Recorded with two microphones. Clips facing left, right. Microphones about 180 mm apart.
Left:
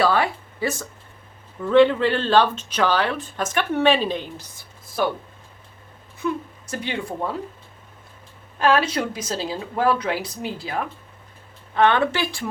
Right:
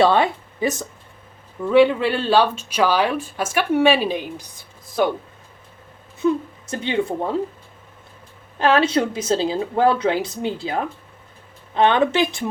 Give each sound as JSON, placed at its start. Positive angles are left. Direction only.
{"t": 0.0, "sound": "speech", "side_deg": -25}
{"t": 6.1, "sound": "a woman's voice", "side_deg": -20}
{"t": 8.5, "sound": "speech", "side_deg": -25}